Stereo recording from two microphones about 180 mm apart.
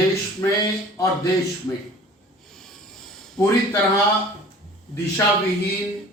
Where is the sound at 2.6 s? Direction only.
Centre (ahead or behind).